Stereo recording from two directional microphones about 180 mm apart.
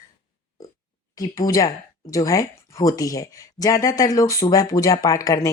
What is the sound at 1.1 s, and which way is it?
Speech, 20° left (ahead or behind).